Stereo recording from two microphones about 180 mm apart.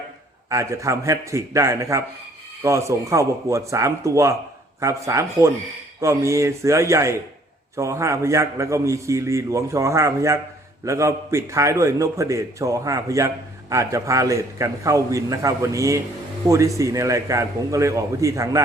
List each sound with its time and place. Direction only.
0.5 s a man's voice: 15° right (ahead or behind)